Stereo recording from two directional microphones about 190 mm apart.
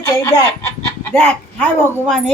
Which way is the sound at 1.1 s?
5° left (ahead or behind).